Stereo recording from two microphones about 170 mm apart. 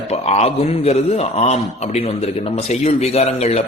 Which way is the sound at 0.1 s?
40° left (ahead or behind).